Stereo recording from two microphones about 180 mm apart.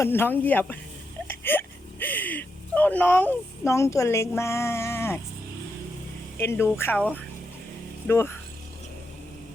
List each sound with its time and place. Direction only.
0.0 s speech: 10° left (ahead or behind)
6.4 s speech: 15° left (ahead or behind)
8.0 s speech: 15° left (ahead or behind)